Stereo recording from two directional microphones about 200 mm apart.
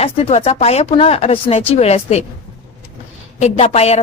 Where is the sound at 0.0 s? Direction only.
30° left (ahead or behind).